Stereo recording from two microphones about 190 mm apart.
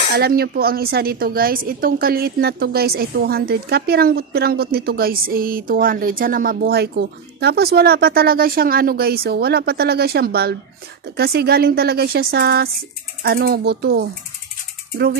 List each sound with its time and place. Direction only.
0.1 s speech: 55° right (ahead or behind)